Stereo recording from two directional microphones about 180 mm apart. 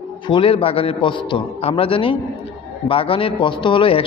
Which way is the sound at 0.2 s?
30° left (ahead or behind).